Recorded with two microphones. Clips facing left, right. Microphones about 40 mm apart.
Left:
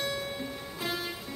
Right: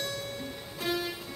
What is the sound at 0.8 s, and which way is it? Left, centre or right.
Music, centre.